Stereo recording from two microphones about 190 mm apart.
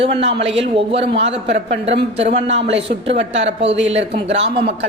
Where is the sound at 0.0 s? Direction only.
30° right (ahead or behind).